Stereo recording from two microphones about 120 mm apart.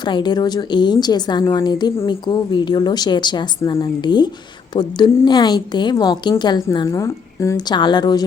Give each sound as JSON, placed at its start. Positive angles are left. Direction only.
{"t": 0.0, "sound": "a woman's voice", "side_deg": 40}
{"t": 7.7, "sound": "a woman's voice", "side_deg": 40}